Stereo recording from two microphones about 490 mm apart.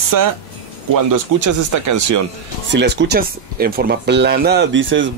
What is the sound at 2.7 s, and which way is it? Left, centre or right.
Speech, right.